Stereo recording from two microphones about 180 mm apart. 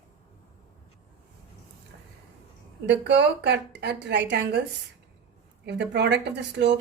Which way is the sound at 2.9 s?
75° right (ahead or behind).